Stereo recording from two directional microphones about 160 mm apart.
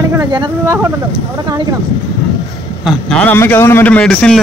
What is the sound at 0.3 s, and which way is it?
Speech, 30° right (ahead or behind).